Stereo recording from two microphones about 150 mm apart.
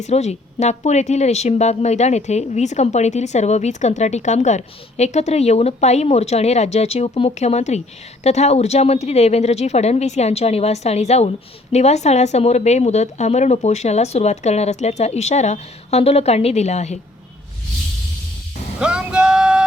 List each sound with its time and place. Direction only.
0.0 s speech: 45° left (ahead or behind)
18.8 s vehicle: 5° right (ahead or behind)